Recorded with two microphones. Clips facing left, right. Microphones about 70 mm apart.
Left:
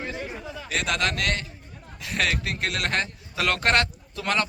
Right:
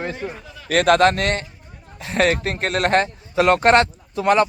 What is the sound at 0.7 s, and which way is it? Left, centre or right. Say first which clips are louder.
Speech: right 12 dB; right.